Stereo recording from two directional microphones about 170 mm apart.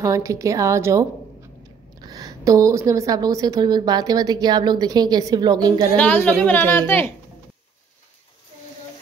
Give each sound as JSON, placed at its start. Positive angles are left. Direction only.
{"t": 0.0, "sound": "a woman's voice", "side_deg": -20}
{"t": 2.0, "sound": "a woman's voice", "side_deg": -20}
{"t": 5.9, "sound": "a woman's voice", "side_deg": 10}